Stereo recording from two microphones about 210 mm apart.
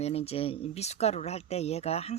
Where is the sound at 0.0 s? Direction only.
30° left (ahead or behind).